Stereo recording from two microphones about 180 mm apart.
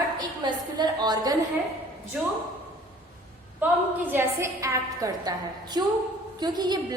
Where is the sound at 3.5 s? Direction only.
10° right (ahead or behind).